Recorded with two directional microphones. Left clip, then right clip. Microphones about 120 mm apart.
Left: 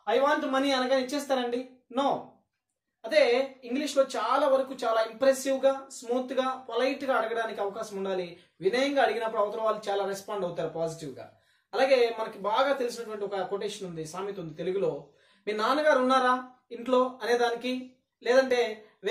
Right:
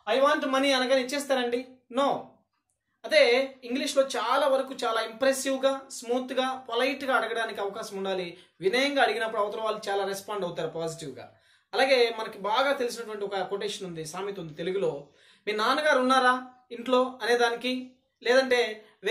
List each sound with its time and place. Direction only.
0.0 s speech: 5° right (ahead or behind)